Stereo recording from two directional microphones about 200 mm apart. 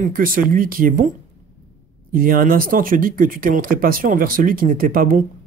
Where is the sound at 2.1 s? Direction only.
45° right (ahead or behind).